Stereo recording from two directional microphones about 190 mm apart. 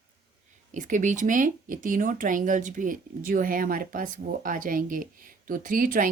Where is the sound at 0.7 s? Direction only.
40° right (ahead or behind).